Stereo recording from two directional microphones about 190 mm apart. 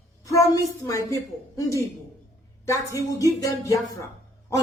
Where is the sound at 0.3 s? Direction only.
15° left (ahead or behind).